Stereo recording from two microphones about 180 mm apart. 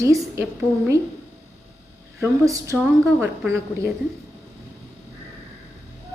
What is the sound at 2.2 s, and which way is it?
Speech, 15° right (ahead or behind).